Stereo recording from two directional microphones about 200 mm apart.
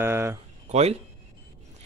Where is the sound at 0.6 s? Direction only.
35° right (ahead or behind).